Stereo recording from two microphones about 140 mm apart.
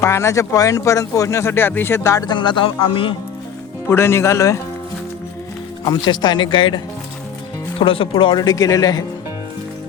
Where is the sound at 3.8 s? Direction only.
15° left (ahead or behind).